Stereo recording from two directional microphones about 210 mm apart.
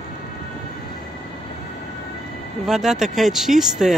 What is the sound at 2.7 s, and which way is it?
Speech, centre (ahead or behind).